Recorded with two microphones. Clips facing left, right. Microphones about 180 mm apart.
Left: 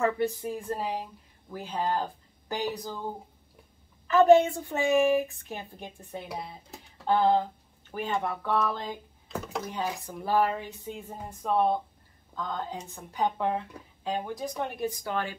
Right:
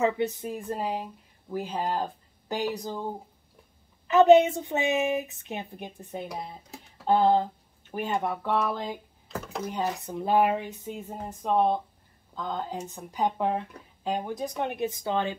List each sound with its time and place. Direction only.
0.0 s a woman's voice: 20° right (ahead or behind); by 9.6 s 5° right (ahead or behind)
9.8 s a woman's voice: 20° right (ahead or behind)